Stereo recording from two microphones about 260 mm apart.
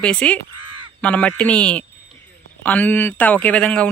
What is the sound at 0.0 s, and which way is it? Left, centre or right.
Speech, centre.